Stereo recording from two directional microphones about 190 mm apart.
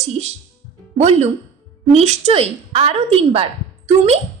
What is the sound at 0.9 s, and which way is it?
A woman's voice, 35° right (ahead or behind).